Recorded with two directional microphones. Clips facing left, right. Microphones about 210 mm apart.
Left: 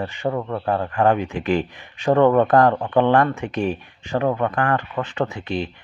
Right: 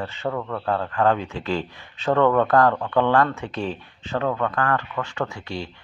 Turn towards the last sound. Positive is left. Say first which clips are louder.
# left 5 dB
turn(degrees=20)  # may be behind; listen again after turning